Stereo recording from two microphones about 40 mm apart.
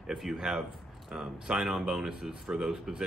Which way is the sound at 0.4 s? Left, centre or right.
Centre.